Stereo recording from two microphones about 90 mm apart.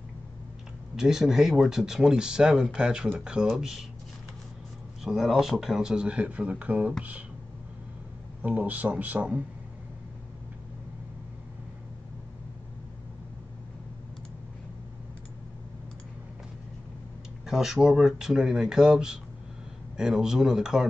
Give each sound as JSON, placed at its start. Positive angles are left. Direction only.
{"t": 0.9, "sound": "speech", "side_deg": -5}
{"t": 5.0, "sound": "speech", "side_deg": -5}
{"t": 8.4, "sound": "speech", "side_deg": -20}
{"t": 17.5, "sound": "speech", "side_deg": -5}